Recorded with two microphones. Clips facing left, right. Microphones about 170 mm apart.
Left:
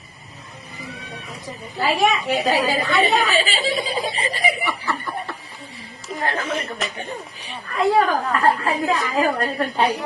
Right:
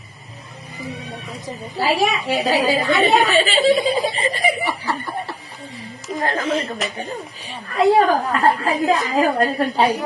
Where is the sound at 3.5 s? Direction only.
45° right (ahead or behind).